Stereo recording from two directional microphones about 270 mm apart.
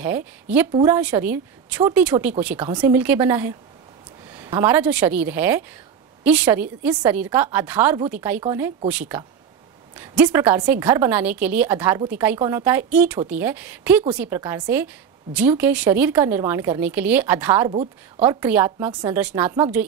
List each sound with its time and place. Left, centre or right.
0.0 s a woman's voice: centre
17.6 s a woman's voice: centre
18.2 s a woman's voice: centre